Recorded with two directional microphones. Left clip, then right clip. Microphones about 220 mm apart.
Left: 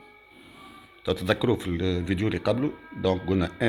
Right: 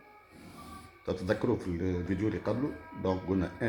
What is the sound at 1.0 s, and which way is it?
Speech, 45° left (ahead or behind).